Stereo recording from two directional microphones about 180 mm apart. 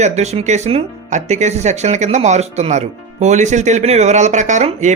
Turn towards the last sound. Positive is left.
turn(degrees=-40)  # may be behind; listen again after turning